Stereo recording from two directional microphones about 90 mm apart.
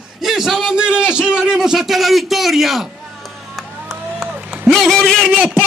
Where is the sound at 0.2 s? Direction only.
5° right (ahead or behind).